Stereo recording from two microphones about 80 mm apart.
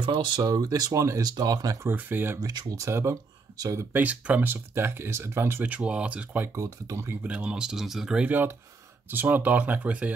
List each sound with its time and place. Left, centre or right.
0.0 s speech: right
0.4 s speech: right
1.2 s speech: right
1.9 s speech: right
2.4 s speech: right
2.8 s speech: right
3.9 s speech: centre
5.6 s speech: centre
6.5 s speech: right
7.2 s speech: centre
8.3 s speech: right